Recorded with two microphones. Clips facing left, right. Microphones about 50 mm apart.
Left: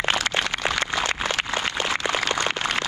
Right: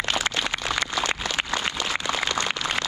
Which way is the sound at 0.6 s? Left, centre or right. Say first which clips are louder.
Left 2 dB; left.